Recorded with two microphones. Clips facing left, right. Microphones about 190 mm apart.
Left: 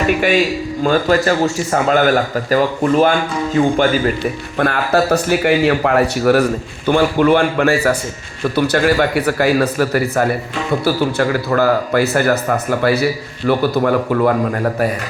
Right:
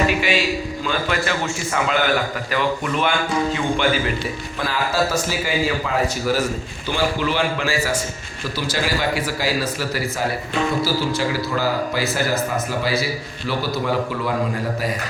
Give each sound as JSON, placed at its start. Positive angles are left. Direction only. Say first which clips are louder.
{"t": 0.9, "sound": "a man's voice", "louder": "left 10 dB", "side_deg": 40}
{"t": 4.5, "sound": "speech", "louder": "left 7 dB", "side_deg": 60}